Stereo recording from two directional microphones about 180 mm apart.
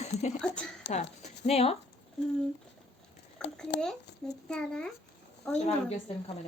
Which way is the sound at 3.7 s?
80° left.